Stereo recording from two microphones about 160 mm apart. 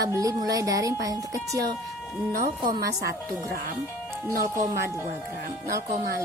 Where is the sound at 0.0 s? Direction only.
20° right (ahead or behind).